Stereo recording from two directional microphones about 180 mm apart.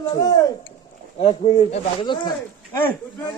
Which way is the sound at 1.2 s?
35° left (ahead or behind).